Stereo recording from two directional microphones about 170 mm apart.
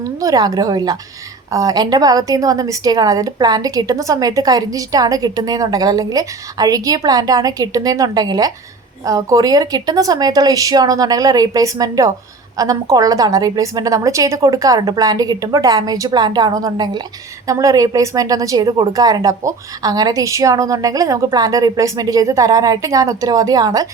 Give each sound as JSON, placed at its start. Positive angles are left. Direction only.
{"t": 0.0, "sound": "a woman's voice", "side_deg": -20}